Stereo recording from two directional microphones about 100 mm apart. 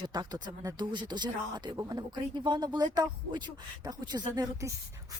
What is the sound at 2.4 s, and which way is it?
Speech, 50° right (ahead or behind).